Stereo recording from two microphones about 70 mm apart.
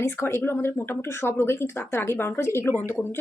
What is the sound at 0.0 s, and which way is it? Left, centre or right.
Speech, left.